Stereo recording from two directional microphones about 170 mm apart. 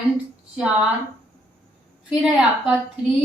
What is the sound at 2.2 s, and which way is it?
Speech, centre (ahead or behind).